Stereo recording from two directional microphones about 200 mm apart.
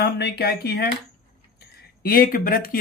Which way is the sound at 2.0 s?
45° left (ahead or behind).